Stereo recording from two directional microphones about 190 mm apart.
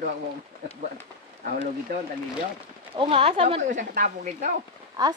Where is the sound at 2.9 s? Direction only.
30° right (ahead or behind); by 4.5 s 45° right (ahead or behind).